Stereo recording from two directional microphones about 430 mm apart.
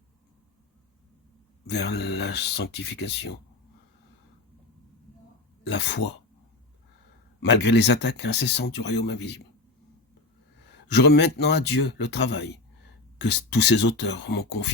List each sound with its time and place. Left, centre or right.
1.6 s speech: left
3.0 s speech: left
5.6 s speech: left
7.4 s speech: left
10.8 s speech: left